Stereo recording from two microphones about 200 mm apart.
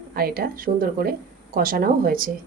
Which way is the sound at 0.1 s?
50° right (ahead or behind).